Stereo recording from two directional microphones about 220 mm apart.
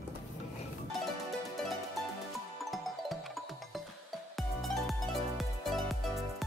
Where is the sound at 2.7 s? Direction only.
Centre (ahead or behind).